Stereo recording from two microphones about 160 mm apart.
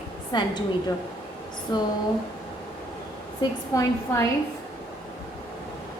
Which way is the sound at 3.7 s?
20° left (ahead or behind).